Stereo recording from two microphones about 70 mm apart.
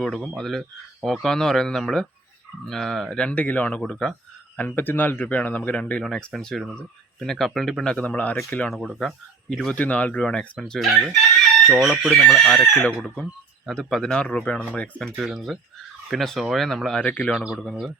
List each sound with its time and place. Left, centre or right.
0.0 s speech: centre
3.2 s speech: left
3.8 s speech: centre
4.5 s speech: left
6.0 s speech: centre
7.9 s speech: left
9.0 s speech: centre
9.7 s speech: centre
10.6 s speech: centre
15.2 s speech: centre
17.0 s speech: centre
17.6 s speech: centre